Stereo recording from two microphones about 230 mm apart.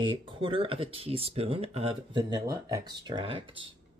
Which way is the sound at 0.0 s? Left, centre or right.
Right.